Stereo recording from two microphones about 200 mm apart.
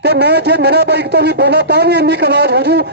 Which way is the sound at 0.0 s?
55° right (ahead or behind).